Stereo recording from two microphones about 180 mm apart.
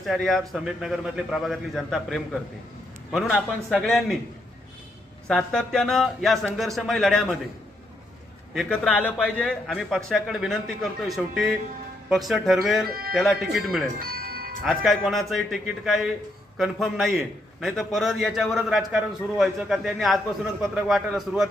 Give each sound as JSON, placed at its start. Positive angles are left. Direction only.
{"t": 0.0, "sound": "a man's voice", "side_deg": 0}
{"t": 5.3, "sound": "a man's voice", "side_deg": 5}
{"t": 8.5, "sound": "a man's voice", "side_deg": 0}
{"t": 12.0, "sound": "a man's voice", "side_deg": 0}
{"t": 12.9, "sound": "speech", "side_deg": -55}
{"t": 13.1, "sound": "a man's voice", "side_deg": 0}
{"t": 14.0, "sound": "music", "side_deg": -55}
{"t": 14.6, "sound": "a man's voice", "side_deg": 0}